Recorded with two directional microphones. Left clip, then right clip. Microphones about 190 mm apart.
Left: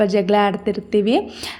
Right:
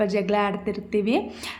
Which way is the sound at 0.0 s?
25° left (ahead or behind).